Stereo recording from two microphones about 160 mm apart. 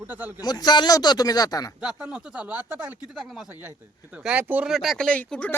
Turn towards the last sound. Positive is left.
turn(degrees=10)  # may be behind; listen again after turning